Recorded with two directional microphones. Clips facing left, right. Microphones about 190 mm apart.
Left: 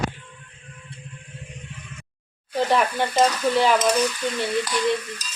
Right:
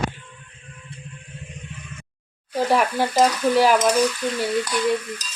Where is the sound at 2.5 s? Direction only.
10° right (ahead or behind).